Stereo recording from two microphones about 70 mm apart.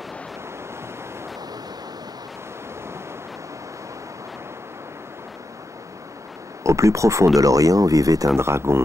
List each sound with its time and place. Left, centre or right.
6.6 s speech: right
8.4 s speech: right